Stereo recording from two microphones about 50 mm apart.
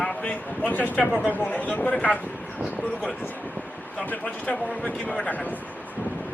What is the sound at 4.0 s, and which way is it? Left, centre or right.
A man's voice, left.